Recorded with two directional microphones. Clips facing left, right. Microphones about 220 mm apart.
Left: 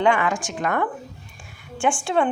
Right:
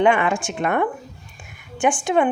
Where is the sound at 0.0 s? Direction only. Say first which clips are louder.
Right 3 dB; 25° right (ahead or behind).